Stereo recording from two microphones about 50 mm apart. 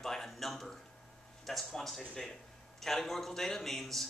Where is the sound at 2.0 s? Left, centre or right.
Centre.